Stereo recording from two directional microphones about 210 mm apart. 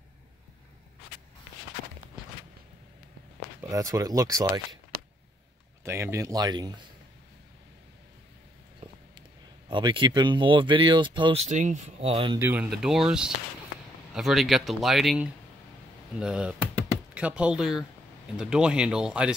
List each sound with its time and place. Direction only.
3.6 s speech: 15° right (ahead or behind)
5.9 s speech: 15° right (ahead or behind)
9.7 s speech: 20° right (ahead or behind)
12.4 s speech: 10° right (ahead or behind)